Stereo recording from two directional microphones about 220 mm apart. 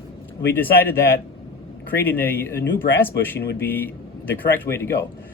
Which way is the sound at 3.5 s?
10° left (ahead or behind).